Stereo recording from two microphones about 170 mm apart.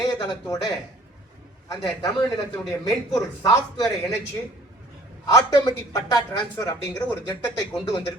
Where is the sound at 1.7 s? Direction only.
20° left (ahead or behind).